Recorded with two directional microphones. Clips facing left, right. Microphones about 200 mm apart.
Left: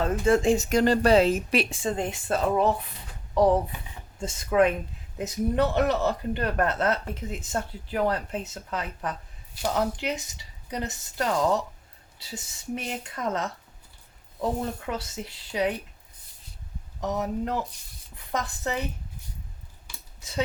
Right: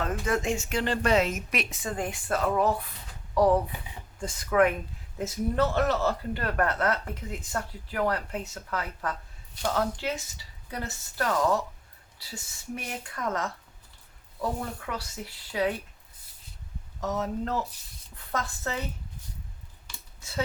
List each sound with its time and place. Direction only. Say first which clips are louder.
0.0 s speech: left 6 dB; 30° left (ahead or behind)
17.0 s speech: left 2 dB; 15° left (ahead or behind)